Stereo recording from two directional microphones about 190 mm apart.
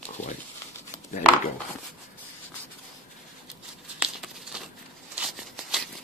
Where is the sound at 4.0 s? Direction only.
Centre (ahead or behind).